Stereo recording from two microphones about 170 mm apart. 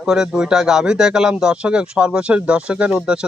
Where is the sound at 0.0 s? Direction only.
5° right (ahead or behind).